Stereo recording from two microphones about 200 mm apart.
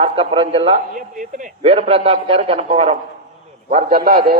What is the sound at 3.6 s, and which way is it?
Speech, 45° right (ahead or behind).